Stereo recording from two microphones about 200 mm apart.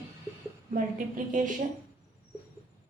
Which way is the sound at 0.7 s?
40° right (ahead or behind).